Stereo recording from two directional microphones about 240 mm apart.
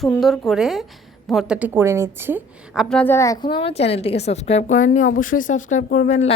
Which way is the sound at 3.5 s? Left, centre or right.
Left.